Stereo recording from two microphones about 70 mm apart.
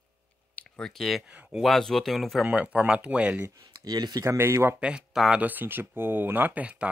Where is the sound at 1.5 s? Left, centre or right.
Centre.